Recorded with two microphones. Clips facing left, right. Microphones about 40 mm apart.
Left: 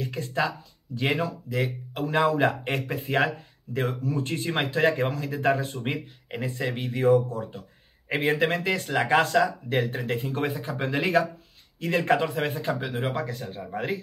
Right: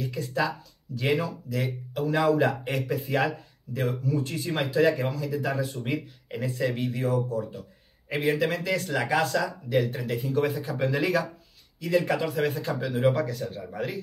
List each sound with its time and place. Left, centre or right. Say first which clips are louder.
0.0 s speech: even; left
8.8 s speech: left 5 dB; left
9.8 s speech: left 1 dB; left
11.8 s speech: left 2 dB; left
12.3 s speech: even; left